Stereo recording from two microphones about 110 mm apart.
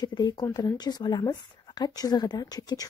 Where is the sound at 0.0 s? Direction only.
40° left (ahead or behind).